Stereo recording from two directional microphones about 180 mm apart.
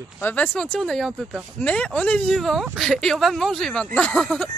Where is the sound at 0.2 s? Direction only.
10° left (ahead or behind).